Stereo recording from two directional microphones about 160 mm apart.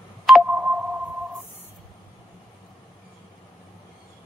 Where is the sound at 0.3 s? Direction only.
Centre (ahead or behind).